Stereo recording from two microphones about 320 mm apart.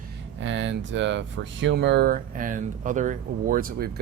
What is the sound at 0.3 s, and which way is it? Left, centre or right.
Speech, right.